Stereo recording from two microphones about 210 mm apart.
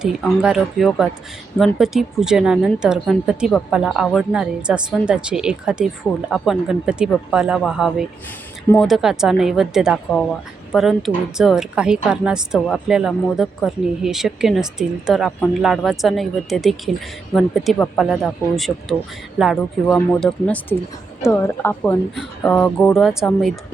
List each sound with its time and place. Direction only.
0.0 s a woman's voice: 5° right (ahead or behind)